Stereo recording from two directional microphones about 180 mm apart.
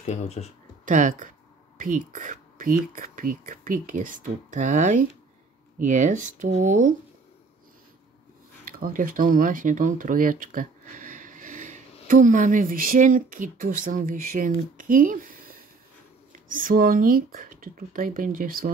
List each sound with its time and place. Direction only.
0.0 s speech: 40° left (ahead or behind)
0.8 s speech: 45° right (ahead or behind)
8.6 s speech: 50° right (ahead or behind)